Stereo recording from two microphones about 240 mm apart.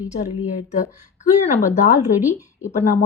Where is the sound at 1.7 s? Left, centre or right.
Left.